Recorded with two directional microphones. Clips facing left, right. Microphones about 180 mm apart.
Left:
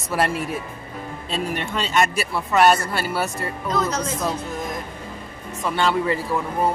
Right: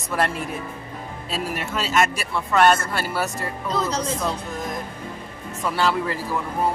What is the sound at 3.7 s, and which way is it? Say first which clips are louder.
Speech: left 1 dB; 30° right (ahead or behind).